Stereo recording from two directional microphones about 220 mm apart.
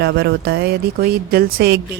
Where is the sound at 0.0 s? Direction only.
50° right (ahead or behind).